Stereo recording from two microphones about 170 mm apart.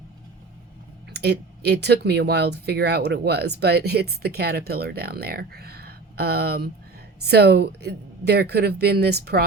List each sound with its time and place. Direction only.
1.1 s speech: 75° right (ahead or behind)